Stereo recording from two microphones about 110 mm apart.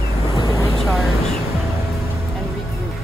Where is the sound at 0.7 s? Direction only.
Centre (ahead or behind).